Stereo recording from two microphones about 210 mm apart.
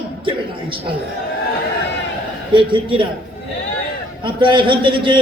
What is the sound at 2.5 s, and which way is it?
Speech, 25° right (ahead or behind).